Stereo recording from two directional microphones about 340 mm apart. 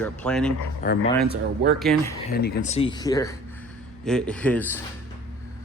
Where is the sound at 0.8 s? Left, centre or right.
Left.